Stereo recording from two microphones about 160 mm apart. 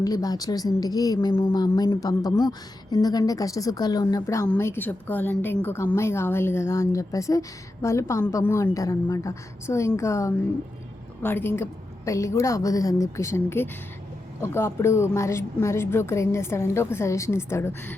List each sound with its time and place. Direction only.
0.0 s a woman's voice: 25° left (ahead or behind)